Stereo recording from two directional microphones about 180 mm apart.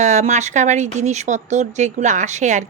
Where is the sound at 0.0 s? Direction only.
40° right (ahead or behind).